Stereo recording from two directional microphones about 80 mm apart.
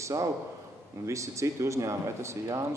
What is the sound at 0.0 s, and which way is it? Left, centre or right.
A man's voice, right.